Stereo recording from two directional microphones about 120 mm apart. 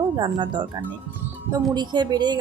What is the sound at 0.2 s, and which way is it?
Speech, 40° right (ahead or behind).